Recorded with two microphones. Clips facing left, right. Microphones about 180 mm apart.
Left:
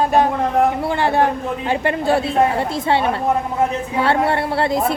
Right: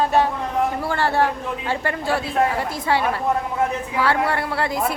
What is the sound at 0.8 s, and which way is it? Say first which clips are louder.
A man's voice: left 3 dB; 20° left (ahead or behind).